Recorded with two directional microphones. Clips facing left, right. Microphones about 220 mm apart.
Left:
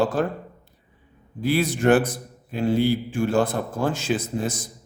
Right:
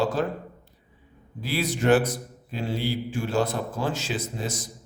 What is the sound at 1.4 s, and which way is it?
Speech, 50° left (ahead or behind).